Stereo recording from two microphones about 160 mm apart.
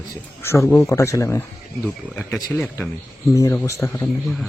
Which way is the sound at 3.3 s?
20° left (ahead or behind).